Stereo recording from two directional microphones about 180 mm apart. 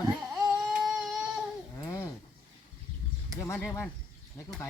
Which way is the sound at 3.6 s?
10° left (ahead or behind).